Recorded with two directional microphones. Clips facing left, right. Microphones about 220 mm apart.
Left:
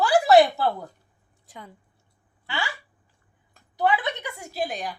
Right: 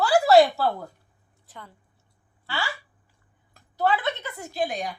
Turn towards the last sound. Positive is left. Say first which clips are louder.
# right 1 dB
turn(degrees=0)  # may be behind; listen again after turning